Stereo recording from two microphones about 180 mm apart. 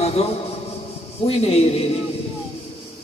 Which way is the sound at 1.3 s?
35° left (ahead or behind).